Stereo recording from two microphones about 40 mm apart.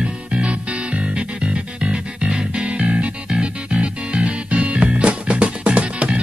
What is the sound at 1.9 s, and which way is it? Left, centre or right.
Music, right.